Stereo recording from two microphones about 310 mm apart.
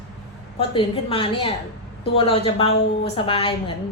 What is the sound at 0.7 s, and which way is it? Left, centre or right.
A woman's voice, centre.